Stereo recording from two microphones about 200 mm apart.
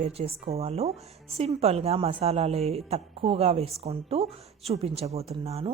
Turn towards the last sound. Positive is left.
turn(degrees=-30)  # may be behind; listen again after turning